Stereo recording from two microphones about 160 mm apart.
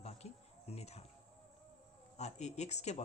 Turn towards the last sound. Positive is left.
turn(degrees=45)  # may be behind; listen again after turning